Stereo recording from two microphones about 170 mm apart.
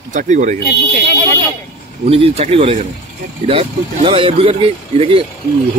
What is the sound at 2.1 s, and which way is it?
Speech, 35° right (ahead or behind).